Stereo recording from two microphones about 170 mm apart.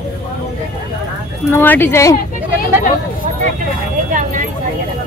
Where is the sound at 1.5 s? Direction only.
10° left (ahead or behind).